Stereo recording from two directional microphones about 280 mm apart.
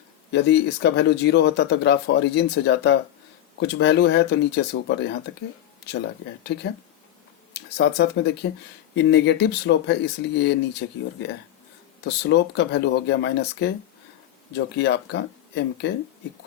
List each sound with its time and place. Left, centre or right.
0.3 s speech: left
7.5 s speech: left
14.8 s speech: left